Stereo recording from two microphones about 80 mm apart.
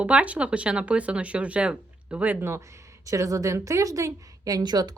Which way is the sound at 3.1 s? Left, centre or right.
Right.